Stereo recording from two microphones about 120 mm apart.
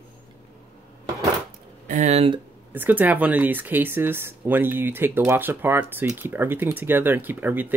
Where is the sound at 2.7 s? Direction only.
15° right (ahead or behind).